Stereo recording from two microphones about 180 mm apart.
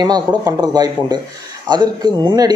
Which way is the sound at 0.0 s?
20° right (ahead or behind).